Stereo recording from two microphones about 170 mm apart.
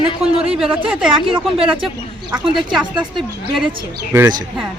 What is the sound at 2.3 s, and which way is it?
Speech, 5° right (ahead or behind).